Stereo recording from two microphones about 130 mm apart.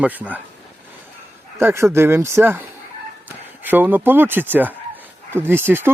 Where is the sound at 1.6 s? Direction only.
20° right (ahead or behind).